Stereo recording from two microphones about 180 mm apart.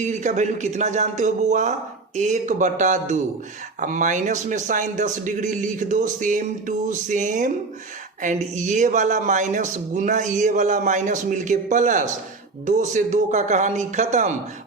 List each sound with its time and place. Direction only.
0.0 s speech: 40° right (ahead or behind)